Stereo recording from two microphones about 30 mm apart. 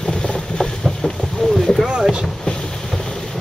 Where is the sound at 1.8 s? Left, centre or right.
Centre.